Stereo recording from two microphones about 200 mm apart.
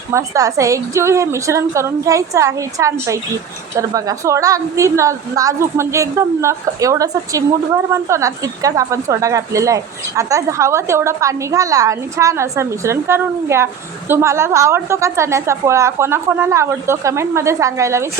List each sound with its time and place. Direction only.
0.1 s a woman's voice: 15° right (ahead or behind)